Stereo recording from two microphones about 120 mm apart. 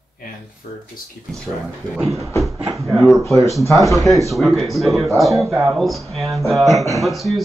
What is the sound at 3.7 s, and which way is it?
Speech, centre (ahead or behind).